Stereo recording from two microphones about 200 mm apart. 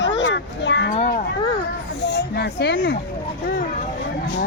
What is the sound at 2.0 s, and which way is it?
Speech, 55° left (ahead or behind).